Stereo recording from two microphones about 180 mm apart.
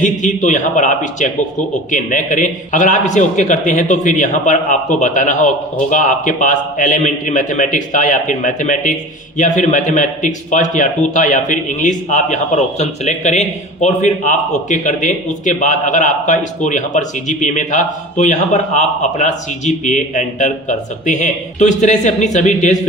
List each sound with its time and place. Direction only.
0.0 s speech: 45° left (ahead or behind)